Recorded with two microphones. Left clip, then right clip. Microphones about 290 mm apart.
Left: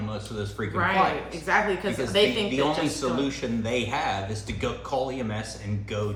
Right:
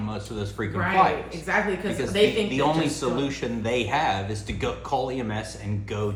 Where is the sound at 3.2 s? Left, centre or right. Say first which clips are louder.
Right 1 dB; right.